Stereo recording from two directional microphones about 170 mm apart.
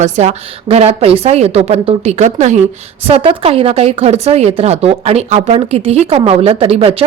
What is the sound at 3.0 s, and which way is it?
Speech, 35° right (ahead or behind).